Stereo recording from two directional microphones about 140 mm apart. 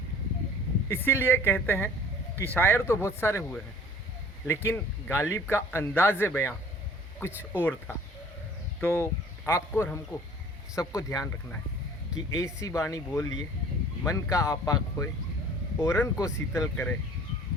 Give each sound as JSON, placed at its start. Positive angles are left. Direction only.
{"t": 0.9, "sound": "a man's voice", "side_deg": 15}
{"t": 15.8, "sound": "speech", "side_deg": 20}